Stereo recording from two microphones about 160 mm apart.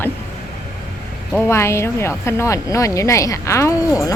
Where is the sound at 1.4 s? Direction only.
15° left (ahead or behind).